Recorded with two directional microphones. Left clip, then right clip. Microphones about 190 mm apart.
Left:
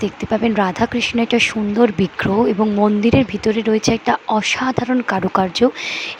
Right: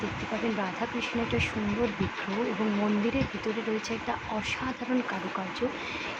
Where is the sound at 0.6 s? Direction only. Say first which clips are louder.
Left 14 dB; 55° left (ahead or behind).